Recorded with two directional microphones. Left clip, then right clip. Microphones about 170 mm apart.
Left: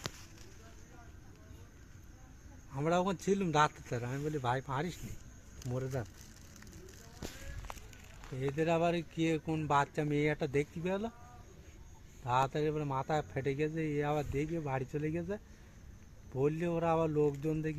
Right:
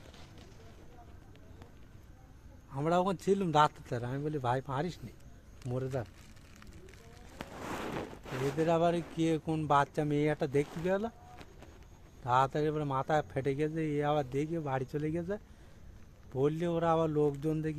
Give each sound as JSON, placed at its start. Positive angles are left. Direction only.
{"t": 2.9, "sound": "a man's voice", "side_deg": -45}
{"t": 4.4, "sound": "a man's voice", "side_deg": -50}
{"t": 5.6, "sound": "speech", "side_deg": -35}
{"t": 8.6, "sound": "speech", "side_deg": -20}
{"t": 12.2, "sound": "speech", "side_deg": -15}